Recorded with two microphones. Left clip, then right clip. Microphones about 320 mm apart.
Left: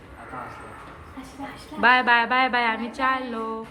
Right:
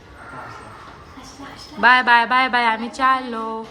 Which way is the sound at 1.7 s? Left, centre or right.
Centre.